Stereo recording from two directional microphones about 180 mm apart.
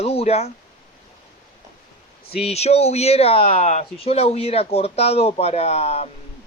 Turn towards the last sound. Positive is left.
turn(degrees=35)  # may be behind; listen again after turning